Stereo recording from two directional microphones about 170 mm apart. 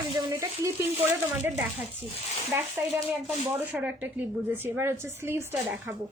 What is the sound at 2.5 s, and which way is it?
A woman's voice, 15° right (ahead or behind).